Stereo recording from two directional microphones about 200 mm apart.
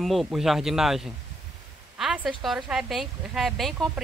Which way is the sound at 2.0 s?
5° right (ahead or behind).